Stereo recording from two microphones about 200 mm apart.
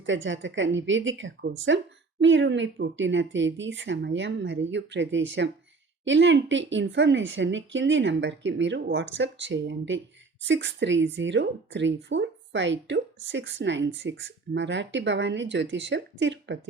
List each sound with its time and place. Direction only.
0.0 s a woman's voice: 70° right (ahead or behind)